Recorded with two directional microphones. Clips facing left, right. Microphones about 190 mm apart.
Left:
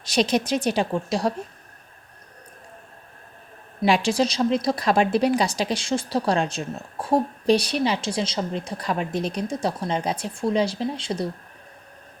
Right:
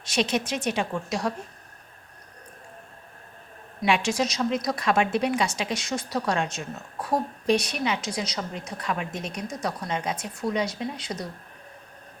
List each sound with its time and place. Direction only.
0.0 s a woman's voice: 35° left (ahead or behind)
3.8 s a woman's voice: 35° left (ahead or behind)